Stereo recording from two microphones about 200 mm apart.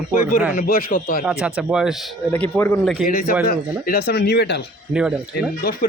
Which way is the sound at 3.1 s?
45° left (ahead or behind).